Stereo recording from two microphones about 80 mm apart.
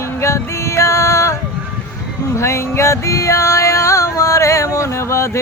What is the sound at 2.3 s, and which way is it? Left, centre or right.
Music, left.